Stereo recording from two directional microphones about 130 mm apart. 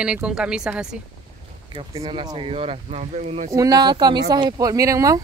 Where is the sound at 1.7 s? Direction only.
45° right (ahead or behind).